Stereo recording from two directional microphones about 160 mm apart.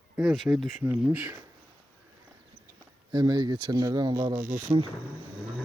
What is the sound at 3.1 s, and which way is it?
Speech, 25° right (ahead or behind).